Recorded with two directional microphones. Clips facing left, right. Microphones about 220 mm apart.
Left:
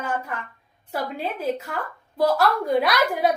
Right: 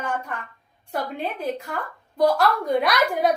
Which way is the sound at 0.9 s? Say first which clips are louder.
Even; 5° left (ahead or behind).